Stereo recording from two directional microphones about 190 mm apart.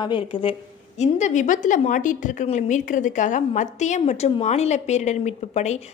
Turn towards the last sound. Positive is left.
turn(degrees=35)  # may be behind; listen again after turning